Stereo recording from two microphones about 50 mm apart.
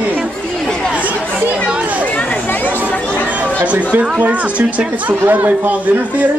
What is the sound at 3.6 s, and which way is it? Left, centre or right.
Chatter, right.